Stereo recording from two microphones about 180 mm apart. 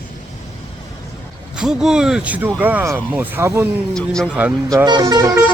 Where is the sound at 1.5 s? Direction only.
5° right (ahead or behind).